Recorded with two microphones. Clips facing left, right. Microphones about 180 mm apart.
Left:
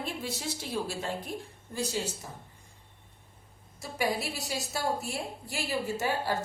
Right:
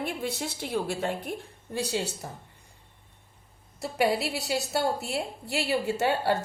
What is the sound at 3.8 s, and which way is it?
A woman's voice, 65° right (ahead or behind).